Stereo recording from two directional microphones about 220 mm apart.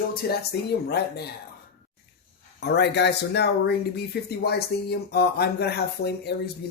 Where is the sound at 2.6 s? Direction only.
50° left (ahead or behind).